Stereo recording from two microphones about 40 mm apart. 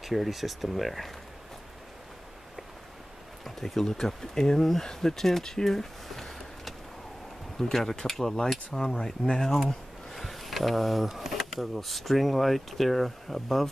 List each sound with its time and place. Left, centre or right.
0.0 s speech: centre
3.4 s speech: centre
9.7 s speech: centre